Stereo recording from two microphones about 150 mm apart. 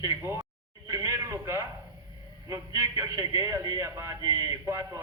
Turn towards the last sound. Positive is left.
turn(degrees=-20)  # may be behind; listen again after turning